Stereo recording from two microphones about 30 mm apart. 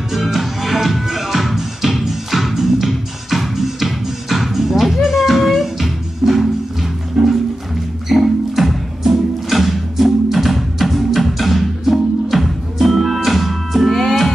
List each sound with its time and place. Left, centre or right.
0.1 s music: centre
7.2 s music: right
8.1 s music: centre